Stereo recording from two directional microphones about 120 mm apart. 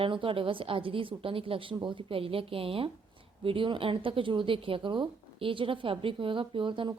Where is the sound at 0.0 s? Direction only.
45° right (ahead or behind).